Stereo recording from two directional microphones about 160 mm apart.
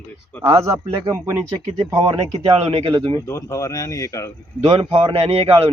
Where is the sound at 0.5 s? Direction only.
20° right (ahead or behind).